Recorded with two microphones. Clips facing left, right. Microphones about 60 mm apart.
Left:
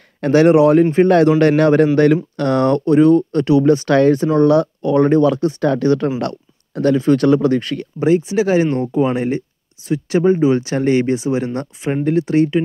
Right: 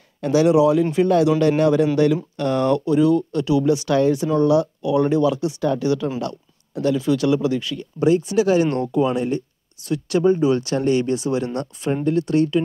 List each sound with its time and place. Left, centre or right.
0.2 s speech: left
8.0 s speech: left
11.9 s speech: left
12.2 s speech: left